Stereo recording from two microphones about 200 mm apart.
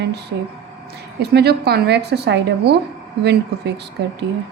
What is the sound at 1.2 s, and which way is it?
A woman's voice, 55° right (ahead or behind).